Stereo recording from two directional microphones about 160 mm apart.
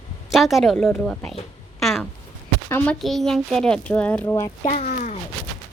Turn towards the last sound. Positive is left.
turn(degrees=55)  # may be behind; listen again after turning